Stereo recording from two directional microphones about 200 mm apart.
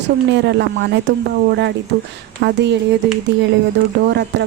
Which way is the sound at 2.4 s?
60° right (ahead or behind).